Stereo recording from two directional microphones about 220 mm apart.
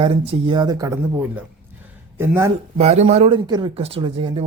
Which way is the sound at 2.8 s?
30° right (ahead or behind).